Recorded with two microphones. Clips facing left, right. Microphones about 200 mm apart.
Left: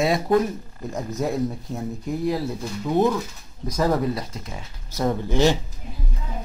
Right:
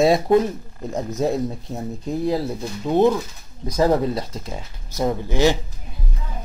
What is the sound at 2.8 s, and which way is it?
Speech, 25° right (ahead or behind).